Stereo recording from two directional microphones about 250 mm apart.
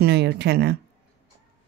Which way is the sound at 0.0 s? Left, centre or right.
Right.